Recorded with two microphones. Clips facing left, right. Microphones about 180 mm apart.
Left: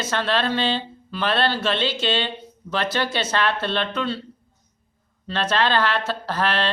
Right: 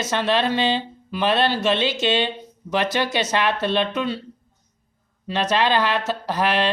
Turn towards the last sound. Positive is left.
turn(degrees=-15)  # may be behind; listen again after turning